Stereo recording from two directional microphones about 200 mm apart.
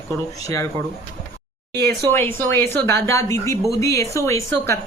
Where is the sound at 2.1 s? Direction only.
10° left (ahead or behind).